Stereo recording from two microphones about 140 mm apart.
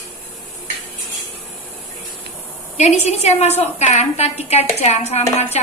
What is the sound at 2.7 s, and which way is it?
A woman's voice, 50° left (ahead or behind).